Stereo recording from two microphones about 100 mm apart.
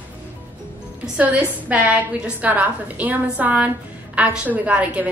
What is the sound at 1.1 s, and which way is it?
A woman's voice, 15° right (ahead or behind).